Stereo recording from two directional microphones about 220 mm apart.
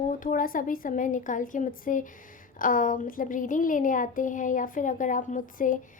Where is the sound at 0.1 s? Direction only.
35° left (ahead or behind).